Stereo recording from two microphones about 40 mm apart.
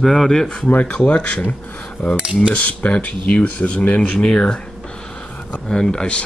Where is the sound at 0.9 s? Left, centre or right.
Left.